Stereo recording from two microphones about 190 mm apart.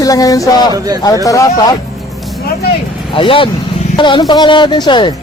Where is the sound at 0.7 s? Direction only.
20° right (ahead or behind).